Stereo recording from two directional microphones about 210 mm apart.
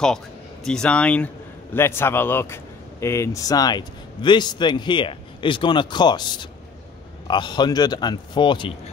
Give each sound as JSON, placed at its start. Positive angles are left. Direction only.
{"t": 0.7, "sound": "a man's voice", "side_deg": 5}